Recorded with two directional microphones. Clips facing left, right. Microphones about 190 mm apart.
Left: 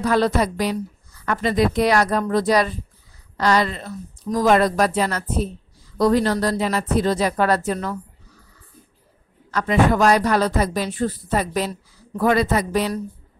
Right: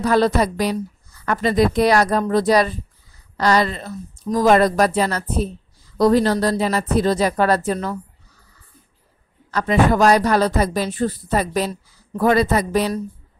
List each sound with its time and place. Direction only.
0.0 s speech: 35° right (ahead or behind)
9.5 s speech: 35° right (ahead or behind)